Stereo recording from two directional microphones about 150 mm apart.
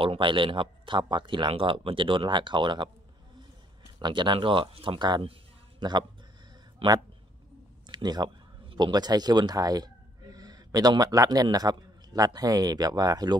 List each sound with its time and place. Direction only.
0.0 s a man's voice: 35° right (ahead or behind)
4.0 s a man's voice: 30° right (ahead or behind)
7.9 s speech: 30° right (ahead or behind)